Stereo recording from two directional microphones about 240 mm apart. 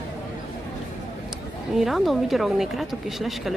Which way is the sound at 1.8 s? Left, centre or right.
Centre.